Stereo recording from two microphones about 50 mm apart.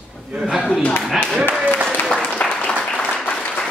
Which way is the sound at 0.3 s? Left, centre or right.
Centre.